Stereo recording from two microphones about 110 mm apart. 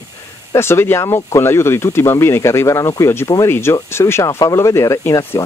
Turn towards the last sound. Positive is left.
turn(degrees=25)  # may be behind; listen again after turning